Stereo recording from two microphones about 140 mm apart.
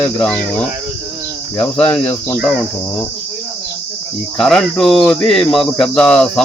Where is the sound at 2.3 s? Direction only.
Centre (ahead or behind).